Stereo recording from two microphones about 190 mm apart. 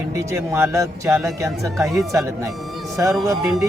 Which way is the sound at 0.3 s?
15° right (ahead or behind).